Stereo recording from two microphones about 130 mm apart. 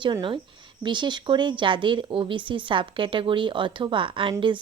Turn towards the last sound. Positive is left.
turn(degrees=-40)  # may be behind; listen again after turning